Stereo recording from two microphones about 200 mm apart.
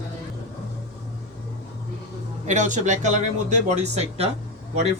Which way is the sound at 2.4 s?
35° right (ahead or behind).